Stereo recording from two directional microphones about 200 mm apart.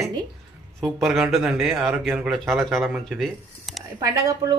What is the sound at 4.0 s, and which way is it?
Speech, 15° right (ahead or behind).